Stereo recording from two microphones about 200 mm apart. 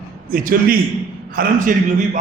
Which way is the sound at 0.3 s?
45° right (ahead or behind).